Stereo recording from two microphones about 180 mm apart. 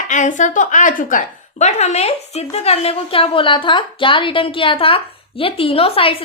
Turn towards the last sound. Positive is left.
turn(degrees=30)  # may be behind; listen again after turning